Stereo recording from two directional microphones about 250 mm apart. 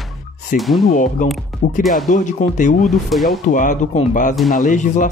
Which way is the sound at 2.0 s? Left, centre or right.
Left.